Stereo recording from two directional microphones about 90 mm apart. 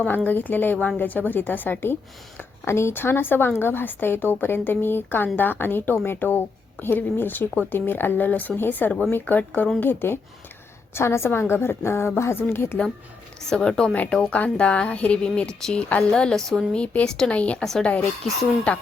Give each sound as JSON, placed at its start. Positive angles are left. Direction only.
{"t": 0.3, "sound": "a woman's voice", "side_deg": 20}
{"t": 13.5, "sound": "speech", "side_deg": 5}